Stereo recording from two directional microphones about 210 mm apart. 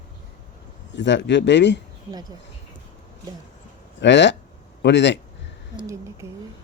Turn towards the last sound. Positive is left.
turn(degrees=-15)  # may be behind; listen again after turning